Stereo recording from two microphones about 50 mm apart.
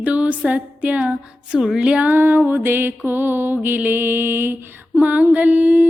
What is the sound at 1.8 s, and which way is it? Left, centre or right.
Music, right.